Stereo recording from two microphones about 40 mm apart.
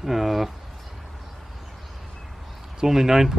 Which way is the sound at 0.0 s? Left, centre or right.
Centre.